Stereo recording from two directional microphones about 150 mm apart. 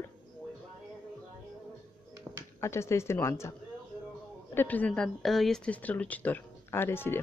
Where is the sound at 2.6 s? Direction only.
20° left (ahead or behind).